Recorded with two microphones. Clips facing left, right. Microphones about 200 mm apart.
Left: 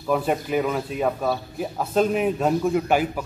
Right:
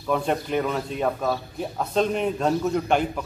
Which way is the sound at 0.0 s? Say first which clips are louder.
Left 1 dB; 5° left (ahead or behind).